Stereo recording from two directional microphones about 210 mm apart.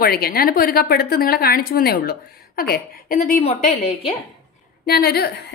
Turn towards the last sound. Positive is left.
turn(degrees=50)  # may be behind; listen again after turning